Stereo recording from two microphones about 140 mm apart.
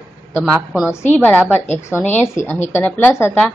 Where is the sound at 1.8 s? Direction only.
15° left (ahead or behind).